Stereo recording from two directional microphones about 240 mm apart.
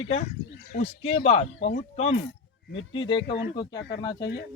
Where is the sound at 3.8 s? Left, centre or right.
Left.